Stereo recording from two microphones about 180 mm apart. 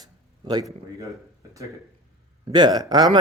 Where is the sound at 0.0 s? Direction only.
20° right (ahead or behind).